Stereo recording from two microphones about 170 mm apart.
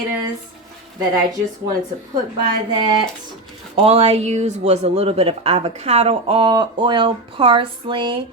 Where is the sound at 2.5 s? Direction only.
25° right (ahead or behind).